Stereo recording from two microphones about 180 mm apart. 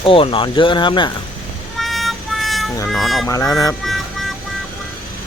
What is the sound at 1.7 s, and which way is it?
Music, centre (ahead or behind).